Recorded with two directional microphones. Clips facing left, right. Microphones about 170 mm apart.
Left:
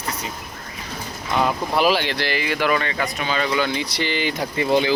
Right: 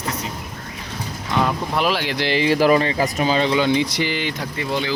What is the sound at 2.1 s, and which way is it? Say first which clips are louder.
Speech: right 5 dB; 25° right (ahead or behind).